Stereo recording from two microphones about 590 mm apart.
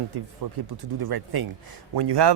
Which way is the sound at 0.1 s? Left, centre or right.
Right.